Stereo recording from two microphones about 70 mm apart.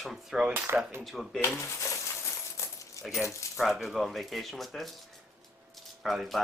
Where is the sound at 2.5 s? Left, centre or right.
Left.